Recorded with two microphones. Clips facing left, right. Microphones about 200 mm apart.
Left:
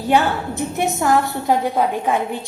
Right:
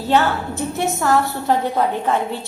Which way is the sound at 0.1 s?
15° left (ahead or behind).